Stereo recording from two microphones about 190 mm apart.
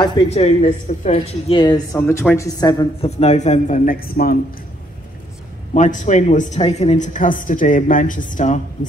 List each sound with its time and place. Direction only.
0.3 s speech: 35° left (ahead or behind)
1.6 s speech: 20° left (ahead or behind)
3.0 s speech: 35° left (ahead or behind); by 4.4 s 50° left (ahead or behind)
5.8 s speech: 40° left (ahead or behind)